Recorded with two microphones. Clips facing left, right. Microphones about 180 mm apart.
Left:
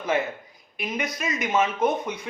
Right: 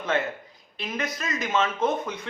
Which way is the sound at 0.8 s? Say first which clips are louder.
Left 2 dB; 15° left (ahead or behind).